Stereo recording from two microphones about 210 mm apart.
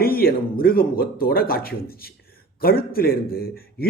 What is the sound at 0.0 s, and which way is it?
A man's voice, 45° left (ahead or behind).